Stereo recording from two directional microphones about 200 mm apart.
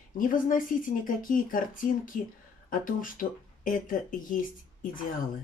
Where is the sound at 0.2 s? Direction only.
45° left (ahead or behind).